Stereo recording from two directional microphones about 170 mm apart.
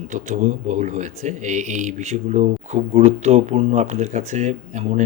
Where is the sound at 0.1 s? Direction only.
45° right (ahead or behind).